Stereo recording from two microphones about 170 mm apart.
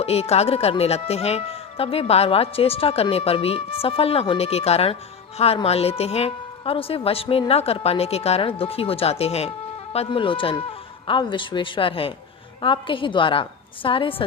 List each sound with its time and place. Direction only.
0.0 s a woman's voice: 35° left (ahead or behind)